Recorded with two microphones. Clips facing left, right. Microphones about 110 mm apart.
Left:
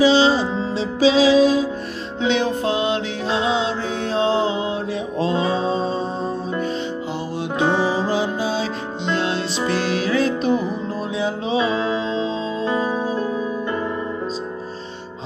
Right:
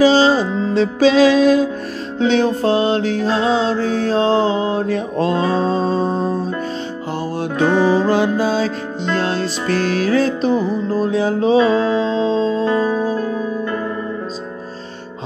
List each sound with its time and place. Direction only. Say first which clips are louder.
0.0 s music: right 3 dB; 45° right (ahead or behind)
2.2 s music: right 5 dB; 40° right (ahead or behind)
7.5 s music: right 3 dB; 20° left (ahead or behind)
7.9 s music: right 6 dB; 55° right (ahead or behind); by 12.6 s 40° right (ahead or behind)
13.1 s music: right 2 dB; 15° left (ahead or behind)